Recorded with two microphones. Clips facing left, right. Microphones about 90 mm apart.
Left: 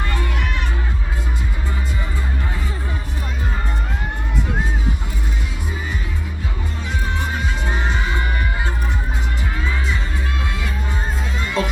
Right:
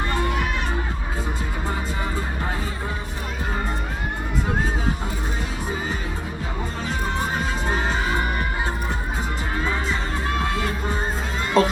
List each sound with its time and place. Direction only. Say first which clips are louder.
11.6 s music: right 5 dB; 40° right (ahead or behind)